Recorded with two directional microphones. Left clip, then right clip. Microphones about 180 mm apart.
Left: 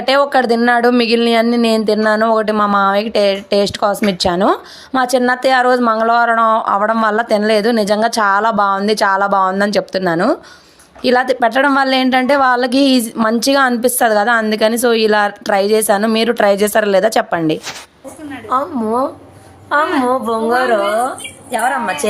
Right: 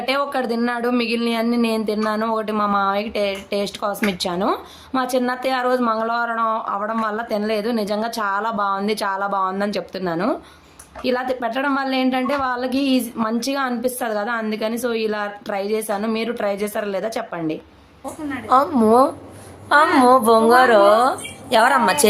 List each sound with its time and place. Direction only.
0.0 s a woman's voice: 40° left (ahead or behind)
18.4 s speech: 10° right (ahead or behind)
21.5 s a woman's voice: 25° right (ahead or behind)